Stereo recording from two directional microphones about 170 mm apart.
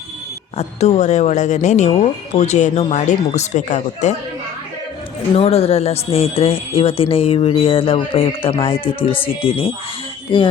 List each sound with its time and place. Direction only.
0.5 s speech: 40° left (ahead or behind)
5.3 s speech: 35° left (ahead or behind)